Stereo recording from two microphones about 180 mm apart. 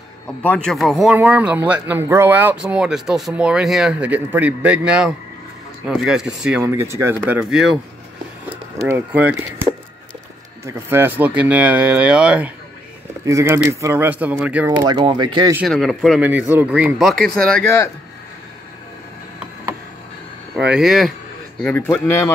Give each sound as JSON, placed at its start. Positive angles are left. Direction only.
{"t": 0.4, "sound": "speech", "side_deg": 5}
{"t": 6.6, "sound": "speech", "side_deg": -15}
{"t": 14.8, "sound": "speech", "side_deg": -25}
{"t": 15.5, "sound": "speech", "side_deg": 0}
{"t": 16.2, "sound": "speech", "side_deg": -10}
{"t": 20.7, "sound": "speech", "side_deg": 0}
{"t": 21.6, "sound": "a man's voice", "side_deg": 10}